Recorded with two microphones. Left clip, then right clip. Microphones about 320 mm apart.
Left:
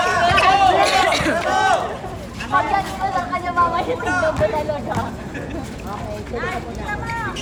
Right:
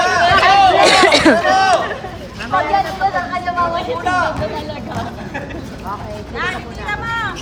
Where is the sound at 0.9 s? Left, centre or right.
Centre.